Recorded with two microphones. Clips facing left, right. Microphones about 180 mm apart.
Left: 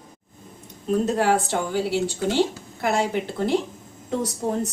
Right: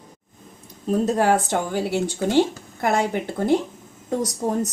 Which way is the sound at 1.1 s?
45° right (ahead or behind).